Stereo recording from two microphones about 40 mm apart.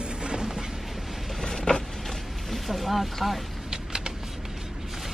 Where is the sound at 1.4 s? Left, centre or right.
Centre.